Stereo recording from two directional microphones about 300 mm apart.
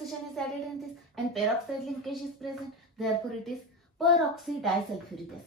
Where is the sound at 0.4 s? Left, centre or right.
Centre.